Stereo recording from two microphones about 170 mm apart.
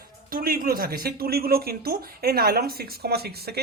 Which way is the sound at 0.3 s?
60° right (ahead or behind).